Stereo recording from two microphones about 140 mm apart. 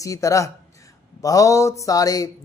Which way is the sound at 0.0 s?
25° left (ahead or behind).